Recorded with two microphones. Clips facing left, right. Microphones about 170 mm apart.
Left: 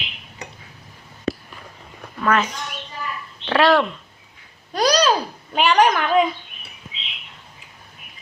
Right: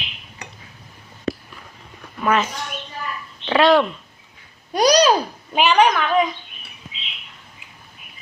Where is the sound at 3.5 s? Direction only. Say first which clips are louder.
Right 2 dB; centre (ahead or behind).